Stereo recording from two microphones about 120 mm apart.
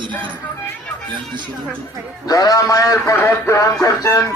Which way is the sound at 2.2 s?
30° left (ahead or behind).